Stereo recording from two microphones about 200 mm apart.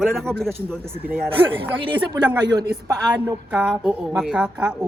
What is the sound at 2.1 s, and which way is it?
Speech, 20° right (ahead or behind).